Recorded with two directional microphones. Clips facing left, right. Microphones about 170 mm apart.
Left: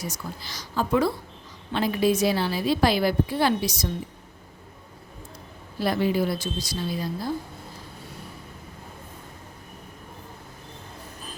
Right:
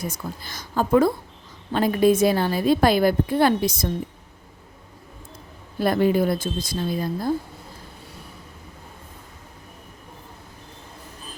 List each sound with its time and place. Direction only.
0.0 s a woman's voice: 55° right (ahead or behind)
5.8 s a woman's voice: 50° right (ahead or behind)